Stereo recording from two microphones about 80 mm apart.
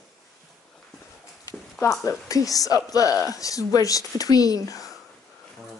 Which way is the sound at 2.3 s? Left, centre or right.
Left.